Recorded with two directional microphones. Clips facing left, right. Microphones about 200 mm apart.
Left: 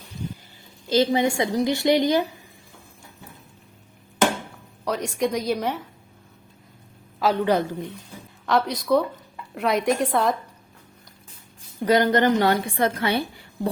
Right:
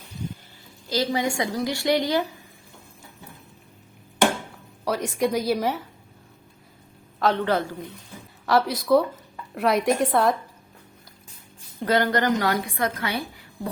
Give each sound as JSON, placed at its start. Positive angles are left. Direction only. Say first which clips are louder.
{"t": 0.9, "sound": "a woman's voice", "louder": "left 5 dB", "side_deg": 25}
{"t": 4.9, "sound": "a woman's voice", "louder": "even", "side_deg": 0}
{"t": 7.2, "sound": "a man's voice", "louder": "left 2 dB", "side_deg": 10}
{"t": 8.4, "sound": "a woman's voice", "louder": "right 1 dB", "side_deg": -5}
{"t": 11.8, "sound": "a woman's voice", "louder": "left 3 dB", "side_deg": 15}